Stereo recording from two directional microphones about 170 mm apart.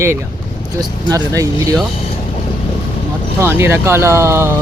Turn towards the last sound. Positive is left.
turn(degrees=-15)  # may be behind; listen again after turning